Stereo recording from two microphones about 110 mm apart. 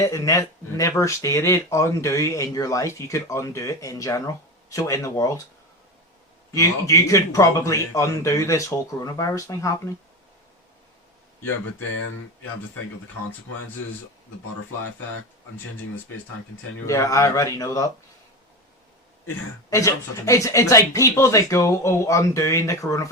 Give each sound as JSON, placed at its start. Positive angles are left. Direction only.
{"t": 0.0, "sound": "speech", "side_deg": 30}
{"t": 6.5, "sound": "speech", "side_deg": 30}
{"t": 16.8, "sound": "speech", "side_deg": 30}
{"t": 19.7, "sound": "speech", "side_deg": 30}